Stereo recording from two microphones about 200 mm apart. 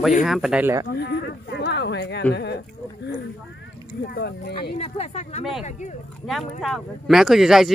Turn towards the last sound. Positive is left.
turn(degrees=0)  # may be behind; listen again after turning